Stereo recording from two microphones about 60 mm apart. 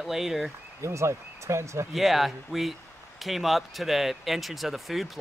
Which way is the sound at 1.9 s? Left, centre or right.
Centre.